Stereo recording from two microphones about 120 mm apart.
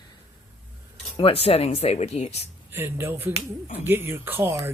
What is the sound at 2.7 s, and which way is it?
Speech, 20° right (ahead or behind).